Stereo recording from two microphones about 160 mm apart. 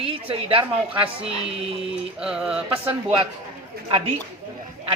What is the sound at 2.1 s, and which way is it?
Mantra, 5° right (ahead or behind).